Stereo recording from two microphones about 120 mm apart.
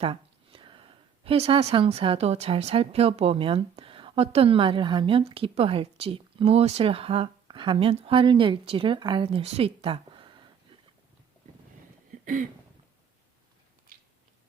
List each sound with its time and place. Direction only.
0.0 s speech: 50° right (ahead or behind)